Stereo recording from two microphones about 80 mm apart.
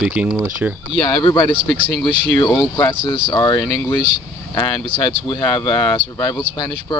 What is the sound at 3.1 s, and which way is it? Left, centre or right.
Speech, left.